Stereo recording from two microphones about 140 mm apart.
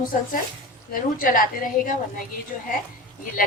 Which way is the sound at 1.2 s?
90° left.